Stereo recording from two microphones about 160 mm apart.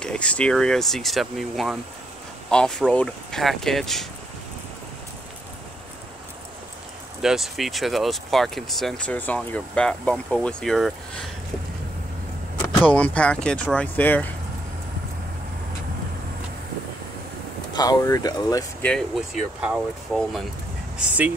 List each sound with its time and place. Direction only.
0.0 s speech: 5° left (ahead or behind)
7.2 s speech: centre (ahead or behind)
12.6 s speech: 10° left (ahead or behind)
17.7 s speech: 20° left (ahead or behind)
18.8 s speech: 5° left (ahead or behind)